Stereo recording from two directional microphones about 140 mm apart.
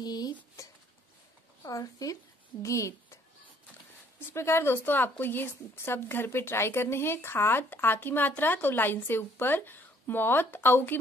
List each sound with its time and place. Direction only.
0.0 s dishes: 30° left (ahead or behind)
1.6 s speech: 25° left (ahead or behind)
4.2 s a woman's voice: 15° left (ahead or behind)